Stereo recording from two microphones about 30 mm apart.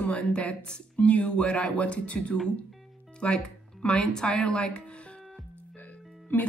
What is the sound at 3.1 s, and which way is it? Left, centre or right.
Speech, left.